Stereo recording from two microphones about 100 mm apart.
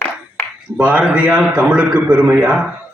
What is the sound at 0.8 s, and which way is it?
A man's voice, 15° right (ahead or behind).